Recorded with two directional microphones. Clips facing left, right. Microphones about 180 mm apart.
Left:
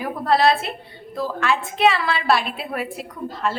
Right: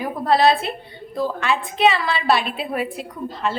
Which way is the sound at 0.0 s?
Centre (ahead or behind).